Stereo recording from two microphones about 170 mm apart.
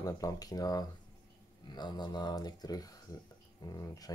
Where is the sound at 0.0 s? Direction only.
20° left (ahead or behind).